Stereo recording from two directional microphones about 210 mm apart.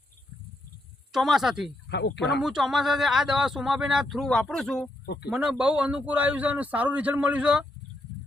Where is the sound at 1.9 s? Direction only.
55° left (ahead or behind).